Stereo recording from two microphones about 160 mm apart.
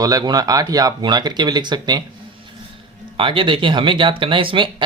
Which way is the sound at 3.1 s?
30° right (ahead or behind).